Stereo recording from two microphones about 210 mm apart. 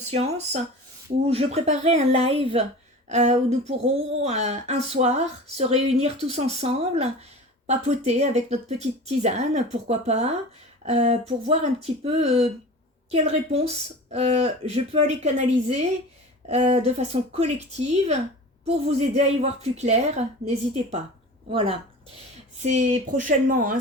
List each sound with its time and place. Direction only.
0.0 s speech: 30° right (ahead or behind)
21.5 s speech: 25° right (ahead or behind)